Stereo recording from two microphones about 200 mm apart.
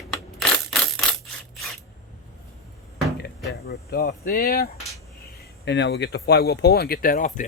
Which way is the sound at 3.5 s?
55° left (ahead or behind).